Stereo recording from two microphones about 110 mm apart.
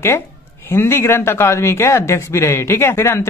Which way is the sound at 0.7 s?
20° left (ahead or behind).